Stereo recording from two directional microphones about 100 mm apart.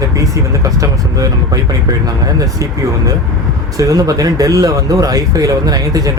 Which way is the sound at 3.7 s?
35° right (ahead or behind).